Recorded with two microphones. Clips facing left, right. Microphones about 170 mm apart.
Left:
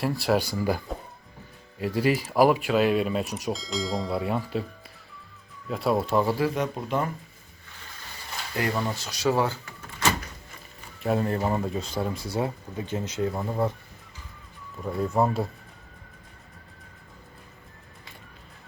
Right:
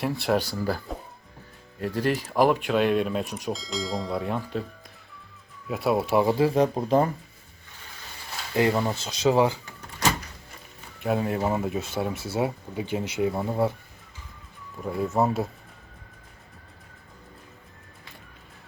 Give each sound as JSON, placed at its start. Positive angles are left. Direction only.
{"t": 0.0, "sound": "speech", "side_deg": 0}
{"t": 1.8, "sound": "speech", "side_deg": 10}
{"t": 5.6, "sound": "speech", "side_deg": -5}
{"t": 6.3, "sound": "speech", "side_deg": -30}
{"t": 8.5, "sound": "speech", "side_deg": -20}
{"t": 11.0, "sound": "speech", "side_deg": -5}
{"t": 14.8, "sound": "speech", "side_deg": -5}